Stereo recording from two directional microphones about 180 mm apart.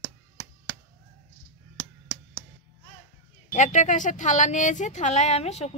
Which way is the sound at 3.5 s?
40° left (ahead or behind).